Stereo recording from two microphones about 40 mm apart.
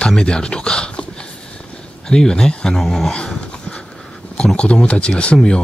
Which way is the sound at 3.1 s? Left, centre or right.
Left.